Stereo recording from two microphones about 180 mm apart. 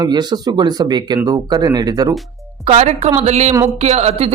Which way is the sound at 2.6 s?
40° right (ahead or behind).